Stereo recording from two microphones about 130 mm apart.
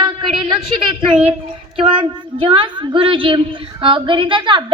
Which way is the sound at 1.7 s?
40° right (ahead or behind).